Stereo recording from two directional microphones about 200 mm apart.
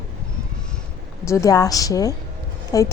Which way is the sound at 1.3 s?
15° left (ahead or behind).